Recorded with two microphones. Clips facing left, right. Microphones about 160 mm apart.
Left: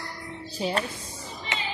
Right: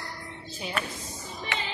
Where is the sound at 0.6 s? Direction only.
35° left (ahead or behind).